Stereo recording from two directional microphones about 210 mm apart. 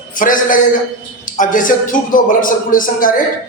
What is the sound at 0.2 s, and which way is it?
A man's voice, 40° left (ahead or behind).